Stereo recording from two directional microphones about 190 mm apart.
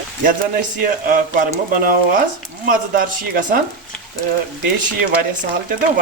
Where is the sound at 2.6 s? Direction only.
45° right (ahead or behind).